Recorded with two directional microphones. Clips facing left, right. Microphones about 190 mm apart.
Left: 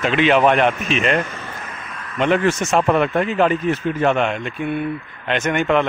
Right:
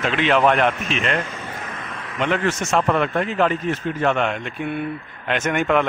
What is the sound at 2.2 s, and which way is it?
A man's voice, 20° left (ahead or behind).